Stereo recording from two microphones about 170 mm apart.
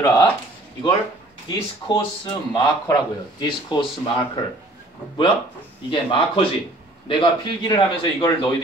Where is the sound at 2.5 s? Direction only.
25° left (ahead or behind).